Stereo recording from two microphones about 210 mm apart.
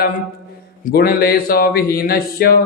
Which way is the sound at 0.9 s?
45° left (ahead or behind).